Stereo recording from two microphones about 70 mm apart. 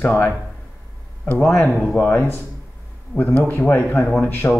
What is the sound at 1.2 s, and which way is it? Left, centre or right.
Speech, left.